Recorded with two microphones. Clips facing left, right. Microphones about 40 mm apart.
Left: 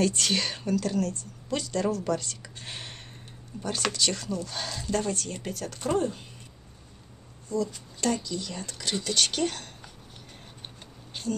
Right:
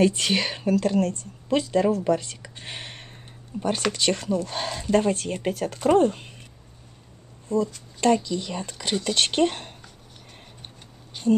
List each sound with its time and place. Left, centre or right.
0.0 s speech: right
1.5 s speech: right
7.4 s speech: right
11.3 s speech: right